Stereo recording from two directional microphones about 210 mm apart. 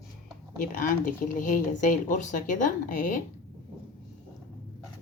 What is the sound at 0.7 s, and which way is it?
Speech, 40° left (ahead or behind).